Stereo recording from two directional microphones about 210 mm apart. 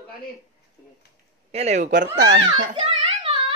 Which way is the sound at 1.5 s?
35° right (ahead or behind).